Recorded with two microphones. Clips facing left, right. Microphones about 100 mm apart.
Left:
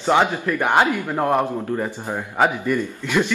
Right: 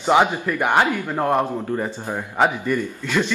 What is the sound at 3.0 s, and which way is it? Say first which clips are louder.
Speech: left 2 dB; 15° left (ahead or behind).